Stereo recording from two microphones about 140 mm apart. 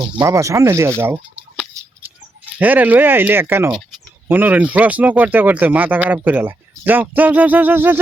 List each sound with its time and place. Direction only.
0.0 s speech: 25° right (ahead or behind)